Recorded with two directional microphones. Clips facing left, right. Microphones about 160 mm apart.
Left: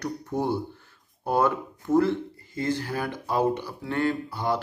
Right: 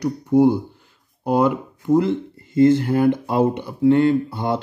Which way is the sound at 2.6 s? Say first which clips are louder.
Right 13 dB; 25° right (ahead or behind).